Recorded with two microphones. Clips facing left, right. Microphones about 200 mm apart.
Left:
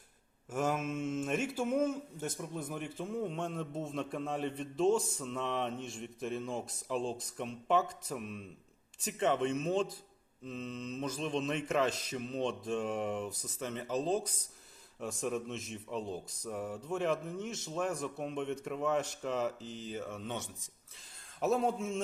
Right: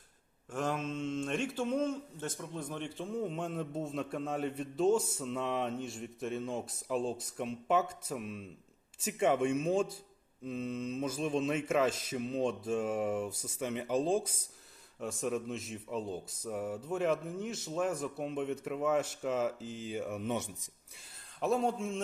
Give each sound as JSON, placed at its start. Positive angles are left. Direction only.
{"t": 0.5, "sound": "speech", "side_deg": 10}
{"t": 21.4, "sound": "speech", "side_deg": 0}